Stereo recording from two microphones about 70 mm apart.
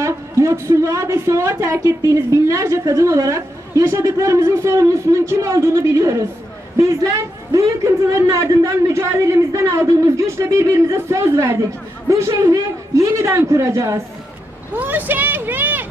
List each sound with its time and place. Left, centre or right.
0.0 s speech: right
14.8 s speech: right